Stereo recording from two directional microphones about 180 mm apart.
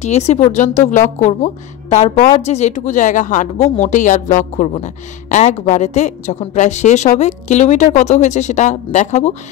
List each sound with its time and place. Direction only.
0.0 s speech: 40° left (ahead or behind)